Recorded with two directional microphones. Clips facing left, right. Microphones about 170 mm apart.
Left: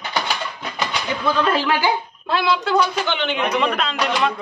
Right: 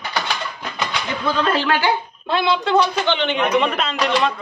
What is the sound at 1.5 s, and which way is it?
Speech, 10° left (ahead or behind).